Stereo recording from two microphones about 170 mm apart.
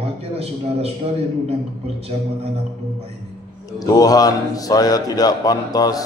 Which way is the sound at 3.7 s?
20° left (ahead or behind).